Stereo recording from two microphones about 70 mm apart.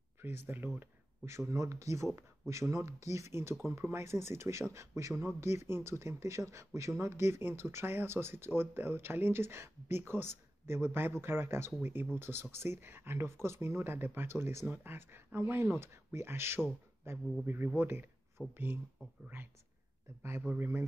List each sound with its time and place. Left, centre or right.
0.2 s a man's voice: right
18.4 s speech: centre
20.4 s speech: right